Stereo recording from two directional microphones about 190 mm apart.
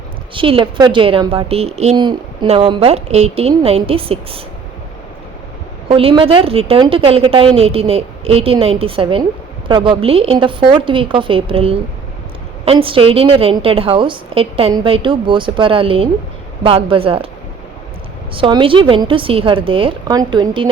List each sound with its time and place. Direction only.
0.3 s a woman's voice: 25° right (ahead or behind)
5.9 s a woman's voice: 30° right (ahead or behind)
18.3 s a woman's voice: 25° right (ahead or behind)